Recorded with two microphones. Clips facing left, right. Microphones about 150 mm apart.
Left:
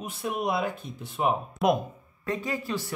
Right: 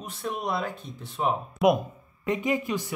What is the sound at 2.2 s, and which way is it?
Speech, 20° right (ahead or behind).